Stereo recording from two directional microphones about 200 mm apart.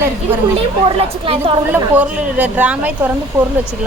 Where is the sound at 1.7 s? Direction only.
5° right (ahead or behind).